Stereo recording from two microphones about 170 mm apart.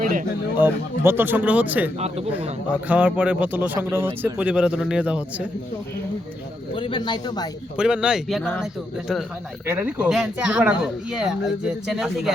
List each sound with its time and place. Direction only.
0.0 s a sound: 50° right (ahead or behind)
0.5 s a man's voice: 10° right (ahead or behind)
2.0 s a man's voice: 40° right (ahead or behind)
2.8 s a man's voice: 10° right (ahead or behind)
6.7 s speech: 30° left (ahead or behind)
7.8 s speech: 5° right (ahead or behind)